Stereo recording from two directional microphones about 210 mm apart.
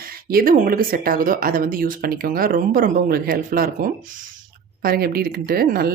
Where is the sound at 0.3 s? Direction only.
45° right (ahead or behind).